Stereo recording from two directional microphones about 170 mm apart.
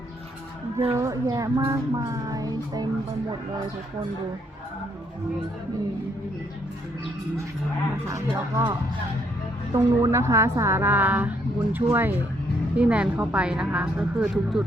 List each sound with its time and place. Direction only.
0.9 s speech: 20° right (ahead or behind)
8.0 s a woman's voice: 15° right (ahead or behind)
9.7 s a woman's voice: 15° right (ahead or behind)